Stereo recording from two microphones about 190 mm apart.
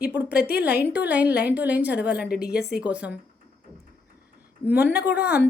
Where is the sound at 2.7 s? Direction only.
5° right (ahead or behind).